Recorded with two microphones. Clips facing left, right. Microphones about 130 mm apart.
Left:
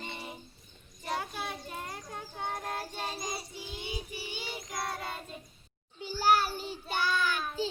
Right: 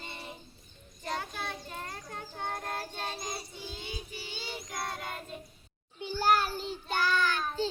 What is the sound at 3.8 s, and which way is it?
Child singing, 15° left (ahead or behind).